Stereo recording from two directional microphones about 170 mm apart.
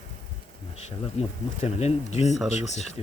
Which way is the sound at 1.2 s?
40° left (ahead or behind).